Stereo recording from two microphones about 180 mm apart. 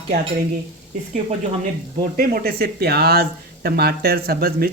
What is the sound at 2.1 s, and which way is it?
Speech, 55° right (ahead or behind).